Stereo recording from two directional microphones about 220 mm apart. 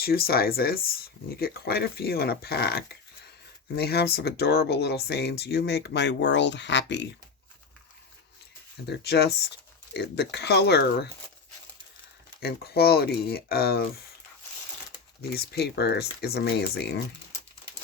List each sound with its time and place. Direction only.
0.0 s speech: 45° left (ahead or behind)
8.9 s speech: 50° left (ahead or behind)
12.4 s speech: 45° left (ahead or behind)
15.2 s speech: 45° left (ahead or behind)